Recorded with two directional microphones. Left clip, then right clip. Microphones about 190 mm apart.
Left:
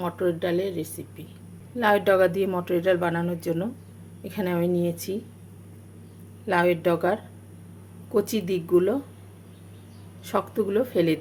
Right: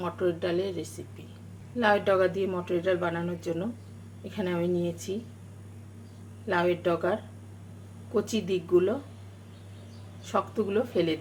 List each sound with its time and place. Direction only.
0.0 s a woman's voice: 30° left (ahead or behind)
6.5 s speech: 35° left (ahead or behind)
10.2 s speech: 35° left (ahead or behind)